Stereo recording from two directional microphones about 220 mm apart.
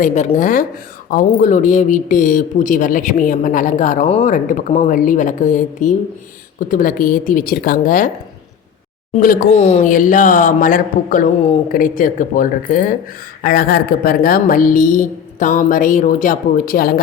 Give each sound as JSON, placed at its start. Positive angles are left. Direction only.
{"t": 0.0, "sound": "a man's voice", "side_deg": 35}
{"t": 9.1, "sound": "a man's voice", "side_deg": 40}